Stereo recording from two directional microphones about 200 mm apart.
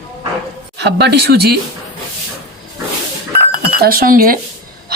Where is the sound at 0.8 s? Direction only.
55° right (ahead or behind).